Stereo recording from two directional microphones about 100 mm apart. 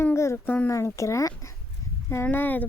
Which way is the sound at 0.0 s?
25° left (ahead or behind).